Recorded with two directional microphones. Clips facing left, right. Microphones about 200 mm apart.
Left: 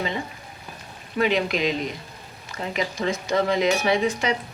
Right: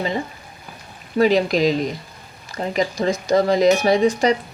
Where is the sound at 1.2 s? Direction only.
35° right (ahead or behind).